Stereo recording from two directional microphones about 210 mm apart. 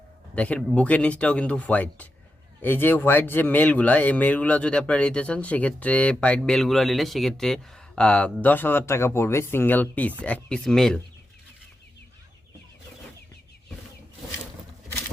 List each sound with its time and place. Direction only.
0.3 s speech: 5° left (ahead or behind)